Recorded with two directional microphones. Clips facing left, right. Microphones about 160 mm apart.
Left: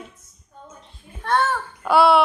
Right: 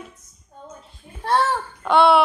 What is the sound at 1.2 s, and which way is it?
Speech, 30° right (ahead or behind).